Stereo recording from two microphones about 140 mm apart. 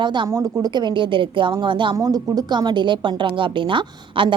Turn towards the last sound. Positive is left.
turn(degrees=-35)  # may be behind; listen again after turning